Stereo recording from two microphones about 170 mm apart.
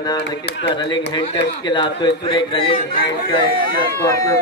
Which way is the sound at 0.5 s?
90° left.